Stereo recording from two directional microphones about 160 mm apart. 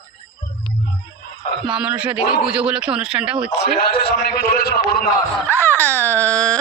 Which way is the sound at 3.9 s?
80° left.